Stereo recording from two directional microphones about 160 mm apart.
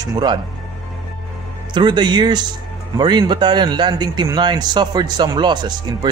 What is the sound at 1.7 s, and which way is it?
A man's voice, 30° right (ahead or behind).